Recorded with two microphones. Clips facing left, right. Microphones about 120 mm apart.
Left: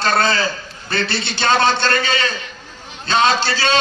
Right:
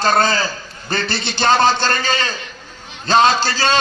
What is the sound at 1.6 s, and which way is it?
A man's voice, 45° right (ahead or behind).